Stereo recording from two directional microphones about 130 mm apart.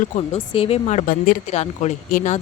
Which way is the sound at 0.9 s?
80° left.